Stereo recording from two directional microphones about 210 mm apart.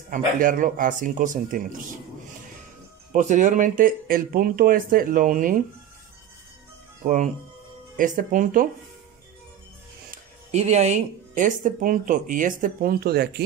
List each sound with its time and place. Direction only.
0.1 s speech: 40° right (ahead or behind)
3.1 s speech: 35° right (ahead or behind)
7.0 s speech: 35° right (ahead or behind)
10.1 s speech: 30° right (ahead or behind); by 13.3 s 50° right (ahead or behind)